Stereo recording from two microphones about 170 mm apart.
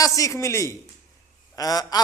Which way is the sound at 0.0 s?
20° left (ahead or behind).